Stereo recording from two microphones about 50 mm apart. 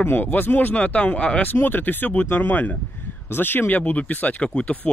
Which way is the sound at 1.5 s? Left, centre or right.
Left.